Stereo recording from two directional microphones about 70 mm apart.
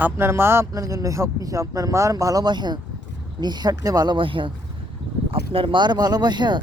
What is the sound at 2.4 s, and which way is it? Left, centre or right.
Speech, right.